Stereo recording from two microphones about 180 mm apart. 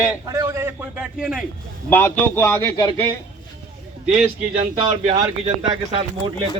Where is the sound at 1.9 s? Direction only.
10° left (ahead or behind).